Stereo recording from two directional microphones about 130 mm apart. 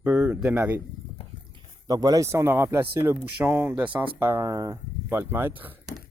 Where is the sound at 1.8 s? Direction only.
30° right (ahead or behind).